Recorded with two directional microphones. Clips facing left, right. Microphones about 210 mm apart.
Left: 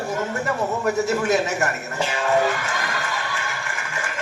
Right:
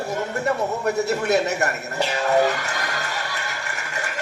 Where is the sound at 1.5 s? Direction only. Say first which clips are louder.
Even; 35° right (ahead or behind).